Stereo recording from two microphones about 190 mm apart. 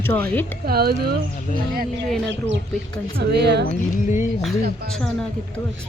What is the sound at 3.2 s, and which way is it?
Speech, 60° right (ahead or behind).